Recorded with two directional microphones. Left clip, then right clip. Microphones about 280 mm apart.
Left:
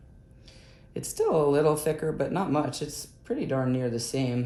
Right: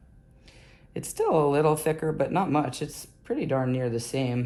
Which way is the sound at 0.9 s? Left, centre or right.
Centre.